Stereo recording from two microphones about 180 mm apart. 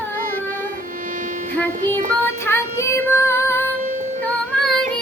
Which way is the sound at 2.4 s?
15° left (ahead or behind).